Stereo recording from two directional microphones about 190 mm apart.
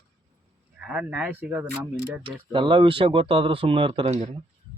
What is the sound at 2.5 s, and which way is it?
Speech, 25° right (ahead or behind).